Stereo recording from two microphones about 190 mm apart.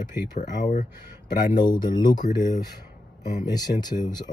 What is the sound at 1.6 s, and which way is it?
Speech, 25° left (ahead or behind).